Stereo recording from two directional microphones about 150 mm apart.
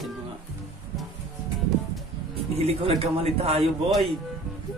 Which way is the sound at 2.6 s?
45° right (ahead or behind).